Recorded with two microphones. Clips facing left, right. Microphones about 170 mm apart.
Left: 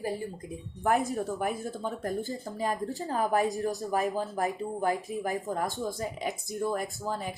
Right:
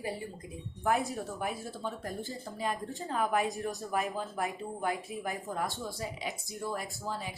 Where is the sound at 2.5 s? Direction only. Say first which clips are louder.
Left 4 dB; 45° left (ahead or behind).